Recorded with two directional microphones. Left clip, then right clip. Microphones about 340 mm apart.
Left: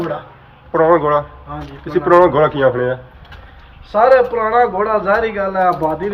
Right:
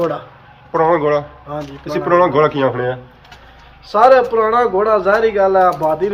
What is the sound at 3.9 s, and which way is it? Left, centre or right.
A man's voice, centre.